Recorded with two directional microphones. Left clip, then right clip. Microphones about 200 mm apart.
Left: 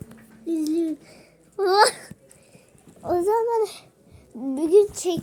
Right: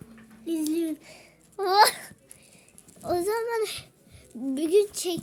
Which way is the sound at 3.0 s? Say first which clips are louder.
Left 5 dB; 15° right (ahead or behind).